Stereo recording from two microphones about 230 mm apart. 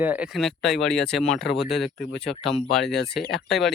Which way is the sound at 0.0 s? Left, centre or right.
Centre.